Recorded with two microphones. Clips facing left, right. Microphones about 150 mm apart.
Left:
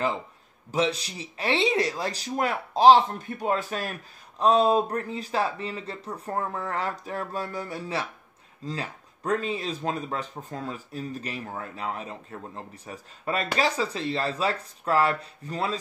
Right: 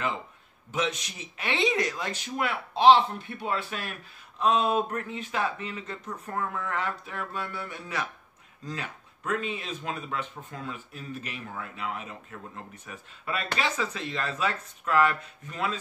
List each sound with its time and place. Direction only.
0.7 s speech: 35° left (ahead or behind)